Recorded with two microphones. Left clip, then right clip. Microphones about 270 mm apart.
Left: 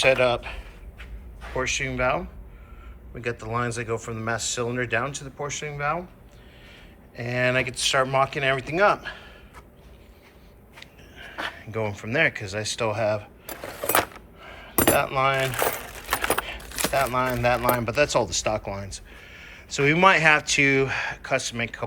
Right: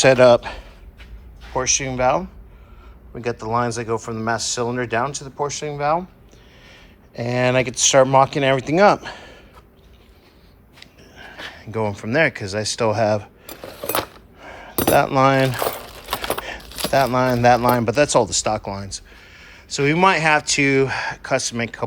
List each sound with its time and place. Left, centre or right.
0.0 s a man's voice: right
10.8 s a sound: centre
11.6 s speech: centre
13.5 s cutlery: centre
13.9 s a sound: centre
14.8 s keys jangling: right
16.5 s speech: right